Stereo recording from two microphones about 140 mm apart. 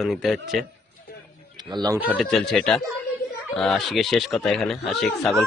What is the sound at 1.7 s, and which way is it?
Speech, 30° right (ahead or behind).